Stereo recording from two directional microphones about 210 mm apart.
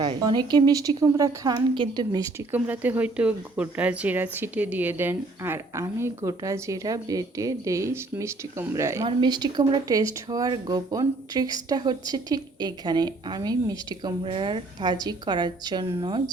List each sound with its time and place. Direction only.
0.0 s speech: 20° right (ahead or behind)